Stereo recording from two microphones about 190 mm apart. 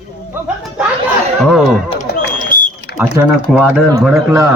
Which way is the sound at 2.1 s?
55° left (ahead or behind).